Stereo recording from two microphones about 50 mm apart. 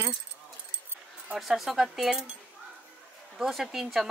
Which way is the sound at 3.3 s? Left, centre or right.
Centre.